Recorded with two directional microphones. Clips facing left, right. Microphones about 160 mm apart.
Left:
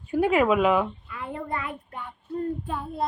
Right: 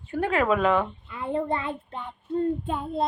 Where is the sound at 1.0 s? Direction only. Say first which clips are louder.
Right 7 dB; 25° right (ahead or behind).